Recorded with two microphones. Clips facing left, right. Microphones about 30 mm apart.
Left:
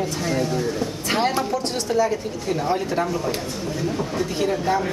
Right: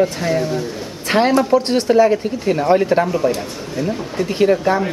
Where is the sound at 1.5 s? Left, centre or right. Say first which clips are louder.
Right 9 dB; right.